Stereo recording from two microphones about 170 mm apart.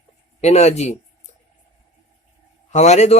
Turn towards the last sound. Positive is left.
turn(degrees=40)  # may be behind; listen again after turning